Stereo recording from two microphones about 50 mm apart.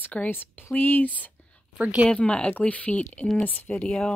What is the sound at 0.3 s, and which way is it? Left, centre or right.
Speech, left.